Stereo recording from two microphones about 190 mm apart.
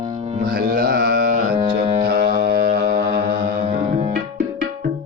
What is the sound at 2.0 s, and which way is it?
Music, 55° right (ahead or behind).